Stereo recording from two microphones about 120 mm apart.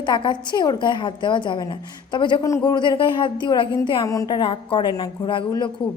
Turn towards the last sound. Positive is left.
turn(degrees=40)  # may be behind; listen again after turning